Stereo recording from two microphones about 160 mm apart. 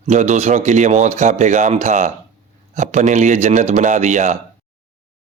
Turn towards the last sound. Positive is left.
turn(degrees=-50)  # may be behind; listen again after turning